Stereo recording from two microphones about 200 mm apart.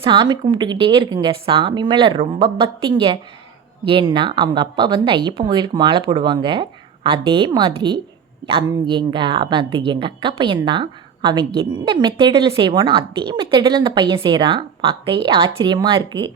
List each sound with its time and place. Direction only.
0.0 s speech: 25° right (ahead or behind)